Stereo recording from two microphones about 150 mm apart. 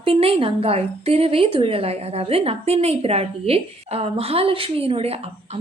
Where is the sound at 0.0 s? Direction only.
40° right (ahead or behind).